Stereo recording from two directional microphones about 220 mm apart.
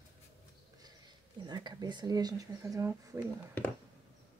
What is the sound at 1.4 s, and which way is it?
Speech, 20° right (ahead or behind).